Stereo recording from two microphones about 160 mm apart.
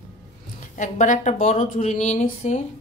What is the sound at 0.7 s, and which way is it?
A woman's voice, 50° left (ahead or behind).